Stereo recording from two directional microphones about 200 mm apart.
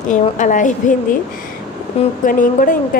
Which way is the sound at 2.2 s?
40° left (ahead or behind).